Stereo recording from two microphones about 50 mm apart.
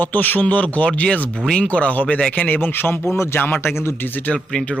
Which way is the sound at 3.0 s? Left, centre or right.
Left.